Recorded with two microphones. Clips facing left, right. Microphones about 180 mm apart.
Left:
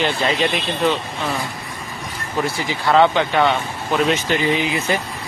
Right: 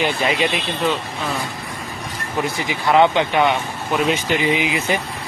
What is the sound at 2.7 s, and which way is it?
Speech, 15° right (ahead or behind).